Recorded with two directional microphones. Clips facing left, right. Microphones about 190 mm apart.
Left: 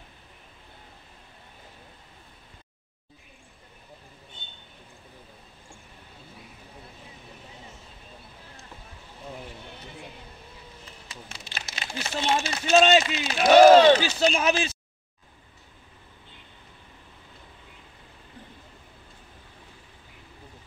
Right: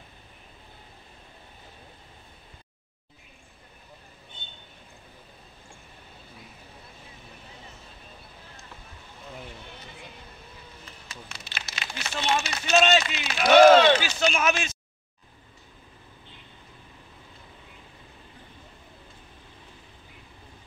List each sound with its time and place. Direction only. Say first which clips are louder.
11.2 s crumpling: left 1 dB; 30° left (ahead or behind)
11.7 s speech: left 3 dB; 30° left (ahead or behind)